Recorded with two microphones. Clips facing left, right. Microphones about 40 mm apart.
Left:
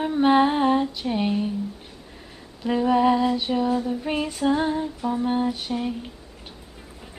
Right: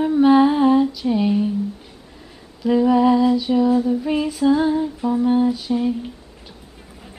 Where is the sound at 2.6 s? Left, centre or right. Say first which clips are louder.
Right 4 dB; centre.